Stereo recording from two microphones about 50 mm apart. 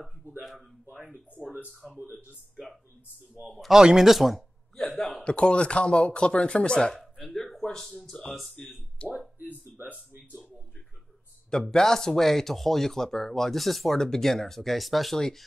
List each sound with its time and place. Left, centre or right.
0.4 s speech: centre
1.7 s speech: centre
3.5 s speech: centre
5.1 s speech: left
6.9 s a sound: centre
8.6 s speech: centre
11.5 s speech: centre